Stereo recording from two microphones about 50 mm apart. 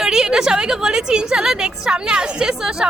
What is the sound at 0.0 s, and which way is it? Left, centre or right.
A woman's voice, centre.